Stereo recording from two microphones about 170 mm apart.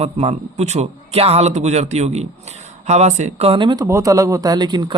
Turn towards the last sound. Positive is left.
turn(degrees=-25)  # may be behind; listen again after turning